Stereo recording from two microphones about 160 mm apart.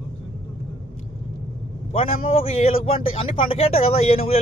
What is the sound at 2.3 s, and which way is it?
A man's voice, 40° left (ahead or behind).